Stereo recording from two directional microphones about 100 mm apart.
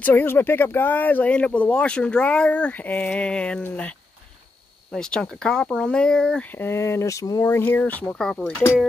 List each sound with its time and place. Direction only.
0.0 s speech: 20° left (ahead or behind)
4.9 s speech: 10° left (ahead or behind)
6.5 s speech: 25° left (ahead or behind)
7.4 s speech: 25° left (ahead or behind)